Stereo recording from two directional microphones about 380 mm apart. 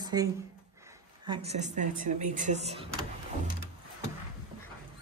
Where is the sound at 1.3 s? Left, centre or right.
Centre.